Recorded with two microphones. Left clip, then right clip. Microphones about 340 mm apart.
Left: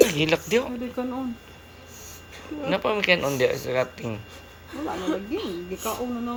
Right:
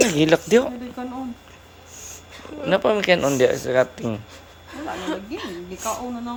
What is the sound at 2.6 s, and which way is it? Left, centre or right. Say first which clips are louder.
Speech: right 5 dB; right.